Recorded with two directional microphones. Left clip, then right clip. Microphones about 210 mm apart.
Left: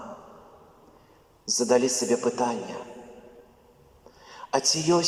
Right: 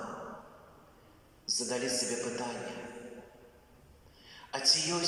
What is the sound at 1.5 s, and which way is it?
Speech, 50° left (ahead or behind).